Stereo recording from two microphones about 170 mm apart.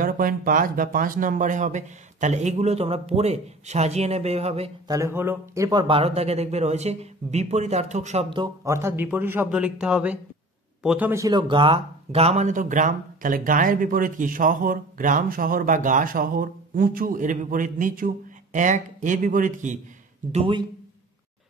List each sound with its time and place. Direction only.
0.0 s speech: 55° right (ahead or behind); by 4.6 s 35° right (ahead or behind)
4.8 s speech: 20° right (ahead or behind); by 8.3 s 40° right (ahead or behind)
8.6 s a man's voice: 15° right (ahead or behind)
11.2 s speech: 25° right (ahead or behind); by 19.8 s 50° right (ahead or behind)
20.3 s speech: 30° right (ahead or behind)